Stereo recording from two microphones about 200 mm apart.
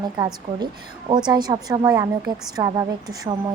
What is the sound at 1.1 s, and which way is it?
A woman's voice, 20° right (ahead or behind).